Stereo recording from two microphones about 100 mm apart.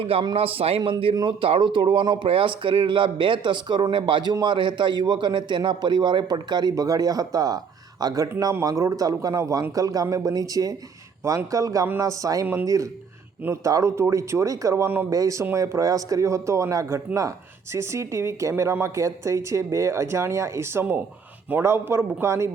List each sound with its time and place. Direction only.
0.0 s a man's voice: 65° right (ahead or behind)
0.3 s a man's voice: 75° right (ahead or behind)
1.1 s speech: 50° right (ahead or behind); by 22.4 s 30° right (ahead or behind)